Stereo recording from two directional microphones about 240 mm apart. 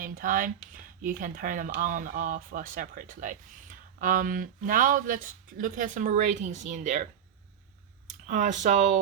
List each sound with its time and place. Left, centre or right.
0.0 s speech: right
8.3 s speech: right